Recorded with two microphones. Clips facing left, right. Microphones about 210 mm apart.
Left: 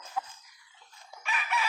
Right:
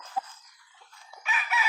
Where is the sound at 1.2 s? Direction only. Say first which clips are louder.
Even; 5° right (ahead or behind).